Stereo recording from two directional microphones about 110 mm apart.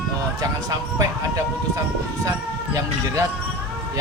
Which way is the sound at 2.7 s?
30° right (ahead or behind).